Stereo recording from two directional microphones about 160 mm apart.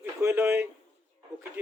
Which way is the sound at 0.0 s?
15° right (ahead or behind).